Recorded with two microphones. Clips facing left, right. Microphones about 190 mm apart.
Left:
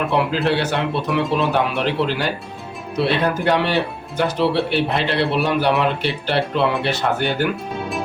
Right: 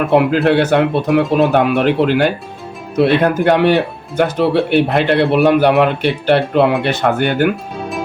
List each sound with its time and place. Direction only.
0.1 s a man's voice: 55° right (ahead or behind)